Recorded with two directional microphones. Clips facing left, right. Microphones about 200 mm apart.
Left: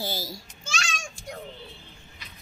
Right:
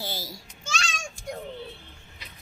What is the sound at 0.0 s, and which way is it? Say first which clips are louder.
Babbling: left 3 dB; 40° left (ahead or behind).